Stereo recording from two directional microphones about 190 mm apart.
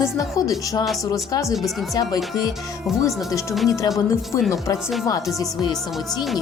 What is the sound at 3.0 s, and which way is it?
Speech, 15° left (ahead or behind).